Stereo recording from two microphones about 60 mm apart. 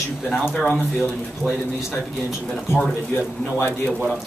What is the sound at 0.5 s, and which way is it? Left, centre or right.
Speech, centre.